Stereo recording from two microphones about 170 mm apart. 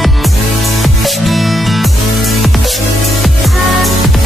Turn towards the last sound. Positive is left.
turn(degrees=0)  # may be behind; listen again after turning